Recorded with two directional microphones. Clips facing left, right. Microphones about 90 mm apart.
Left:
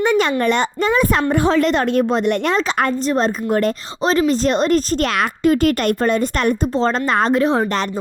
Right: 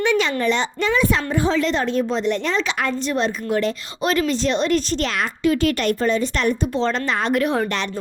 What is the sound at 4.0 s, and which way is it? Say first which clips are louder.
A woman's voice: left 4 dB; 30° left (ahead or behind).